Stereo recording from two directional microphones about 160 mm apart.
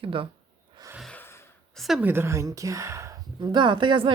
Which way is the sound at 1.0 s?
5° left (ahead or behind).